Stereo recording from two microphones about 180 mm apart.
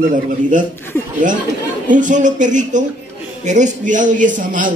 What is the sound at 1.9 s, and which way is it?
Speech, 45° right (ahead or behind).